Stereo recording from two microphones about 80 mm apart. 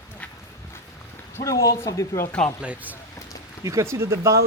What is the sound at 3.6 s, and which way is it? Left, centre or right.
Speech, right.